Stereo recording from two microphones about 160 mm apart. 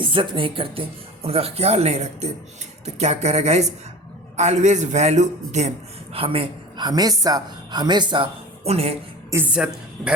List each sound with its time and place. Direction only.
0.0 s a man's voice: 30° right (ahead or behind)
6.1 s a woman's voice: 35° right (ahead or behind)
9.3 s a woman's voice: 10° right (ahead or behind)